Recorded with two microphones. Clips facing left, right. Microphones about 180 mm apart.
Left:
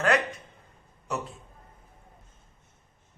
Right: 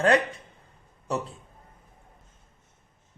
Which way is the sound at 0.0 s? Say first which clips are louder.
Right 3 dB; 30° right (ahead or behind).